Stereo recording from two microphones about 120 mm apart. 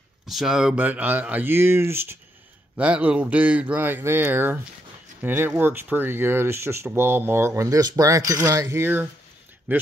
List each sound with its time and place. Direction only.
0.3 s a man's voice: 5° right (ahead or behind)